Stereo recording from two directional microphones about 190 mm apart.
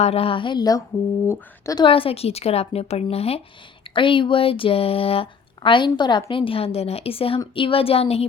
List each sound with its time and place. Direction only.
0.0 s speech: 30° left (ahead or behind)